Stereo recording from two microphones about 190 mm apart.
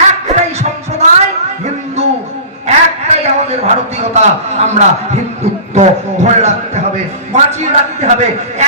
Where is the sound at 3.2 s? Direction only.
35° right (ahead or behind).